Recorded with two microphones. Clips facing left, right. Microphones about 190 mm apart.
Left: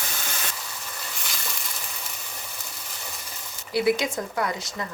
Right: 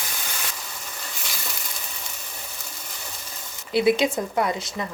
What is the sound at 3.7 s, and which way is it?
Speech, 20° right (ahead or behind).